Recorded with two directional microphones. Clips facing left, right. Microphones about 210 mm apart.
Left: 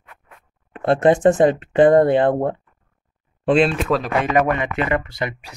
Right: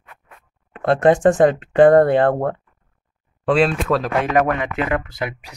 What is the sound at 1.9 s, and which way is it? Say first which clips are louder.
Speech: even; 20° left (ahead or behind).